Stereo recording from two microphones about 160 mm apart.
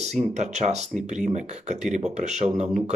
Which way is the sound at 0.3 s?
45° right (ahead or behind).